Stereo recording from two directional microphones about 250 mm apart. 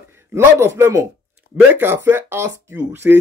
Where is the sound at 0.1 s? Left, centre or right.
Centre.